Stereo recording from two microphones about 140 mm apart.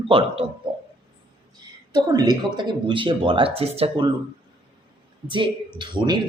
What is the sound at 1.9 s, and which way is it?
Speech, 30° right (ahead or behind).